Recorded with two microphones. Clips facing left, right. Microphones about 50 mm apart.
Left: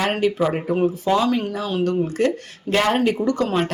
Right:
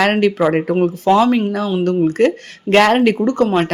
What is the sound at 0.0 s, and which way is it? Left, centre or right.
Speech, right.